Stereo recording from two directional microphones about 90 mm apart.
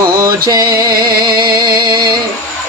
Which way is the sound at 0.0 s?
45° right (ahead or behind).